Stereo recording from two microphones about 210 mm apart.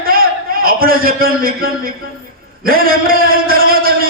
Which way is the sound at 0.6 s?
45° right (ahead or behind).